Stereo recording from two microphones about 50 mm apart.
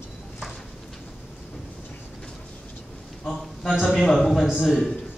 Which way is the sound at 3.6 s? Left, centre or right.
Centre.